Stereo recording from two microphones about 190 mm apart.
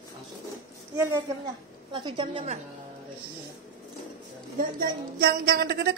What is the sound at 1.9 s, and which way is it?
Speech, 25° right (ahead or behind).